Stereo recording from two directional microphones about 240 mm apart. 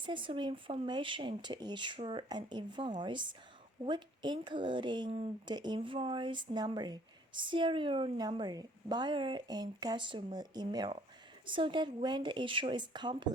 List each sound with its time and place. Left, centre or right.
0.0 s speech: centre